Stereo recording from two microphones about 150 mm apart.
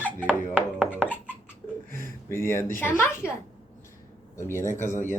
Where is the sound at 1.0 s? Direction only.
10° right (ahead or behind).